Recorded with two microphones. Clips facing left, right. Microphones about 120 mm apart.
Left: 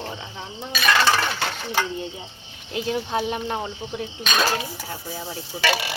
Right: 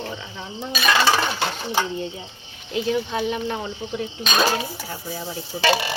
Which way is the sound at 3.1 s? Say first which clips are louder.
Even; 40° left (ahead or behind).